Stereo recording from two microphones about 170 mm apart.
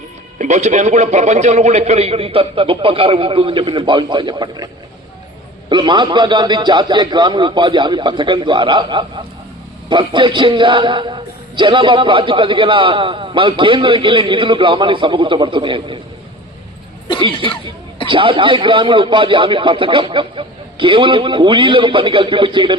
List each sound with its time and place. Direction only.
0.3 s a man's voice: 45° right (ahead or behind)
17.2 s a man's voice: 30° right (ahead or behind)